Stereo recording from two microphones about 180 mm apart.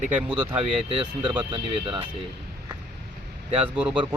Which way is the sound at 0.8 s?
30° right (ahead or behind).